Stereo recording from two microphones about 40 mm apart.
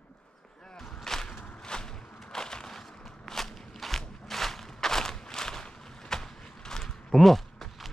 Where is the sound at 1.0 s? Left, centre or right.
Centre.